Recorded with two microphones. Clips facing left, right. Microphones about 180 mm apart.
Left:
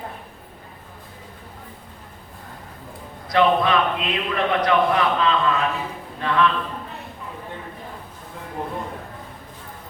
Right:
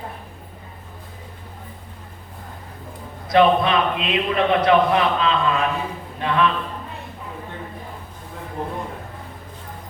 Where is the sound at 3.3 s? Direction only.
20° right (ahead or behind).